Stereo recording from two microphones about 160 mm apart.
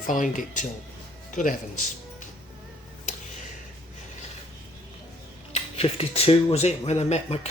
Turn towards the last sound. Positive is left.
turn(degrees=40)  # may be behind; listen again after turning